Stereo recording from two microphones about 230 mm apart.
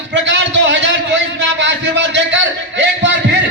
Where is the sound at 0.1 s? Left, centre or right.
Right.